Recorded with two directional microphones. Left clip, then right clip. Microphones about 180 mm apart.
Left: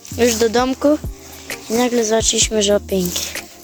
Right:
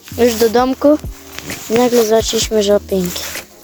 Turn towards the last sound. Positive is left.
turn(degrees=-5)  # may be behind; listen again after turning